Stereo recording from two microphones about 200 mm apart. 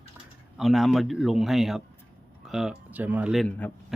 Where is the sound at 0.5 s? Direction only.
Centre (ahead or behind).